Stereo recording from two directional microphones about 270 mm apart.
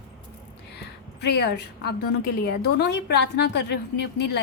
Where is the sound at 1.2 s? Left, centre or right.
Left.